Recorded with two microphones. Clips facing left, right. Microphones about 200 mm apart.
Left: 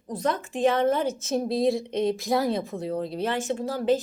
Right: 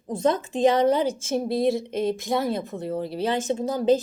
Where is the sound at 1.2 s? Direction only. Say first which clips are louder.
Right 1 dB; 5° right (ahead or behind).